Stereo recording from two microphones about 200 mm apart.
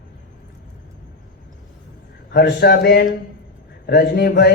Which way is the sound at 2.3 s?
50° left (ahead or behind).